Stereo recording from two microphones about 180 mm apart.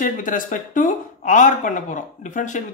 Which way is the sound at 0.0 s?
50° left (ahead or behind).